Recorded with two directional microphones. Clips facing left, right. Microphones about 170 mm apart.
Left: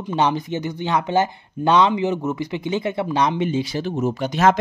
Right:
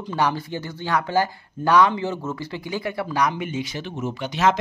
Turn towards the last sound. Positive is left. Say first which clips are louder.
# left 4 dB
turn(degrees=45)  # may be behind; listen again after turning